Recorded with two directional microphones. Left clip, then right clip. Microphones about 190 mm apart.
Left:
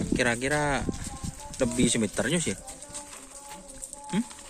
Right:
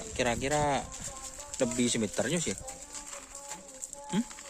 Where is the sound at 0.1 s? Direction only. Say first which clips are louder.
Left 3 dB; 5° right (ahead or behind).